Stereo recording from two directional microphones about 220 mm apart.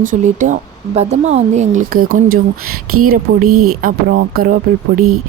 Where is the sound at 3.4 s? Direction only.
85° right.